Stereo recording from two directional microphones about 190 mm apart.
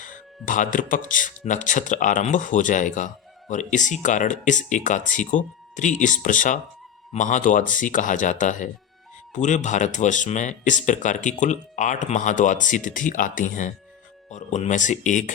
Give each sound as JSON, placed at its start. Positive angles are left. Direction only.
{"t": 0.0, "sound": "speech", "side_deg": 45}